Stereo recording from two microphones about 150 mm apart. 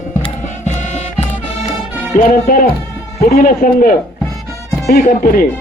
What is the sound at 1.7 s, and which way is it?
Music, 60° left (ahead or behind).